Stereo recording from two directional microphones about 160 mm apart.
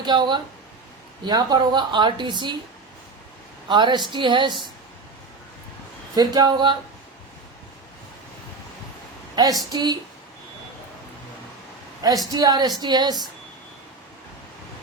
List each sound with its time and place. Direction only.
0.0 s speech: 30° right (ahead or behind)
3.7 s speech: 30° right (ahead or behind)
6.1 s speech: 25° right (ahead or behind)
9.3 s speech: 25° right (ahead or behind)
12.3 s speech: 25° right (ahead or behind)